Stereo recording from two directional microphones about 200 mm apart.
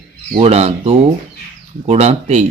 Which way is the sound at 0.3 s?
30° right (ahead or behind).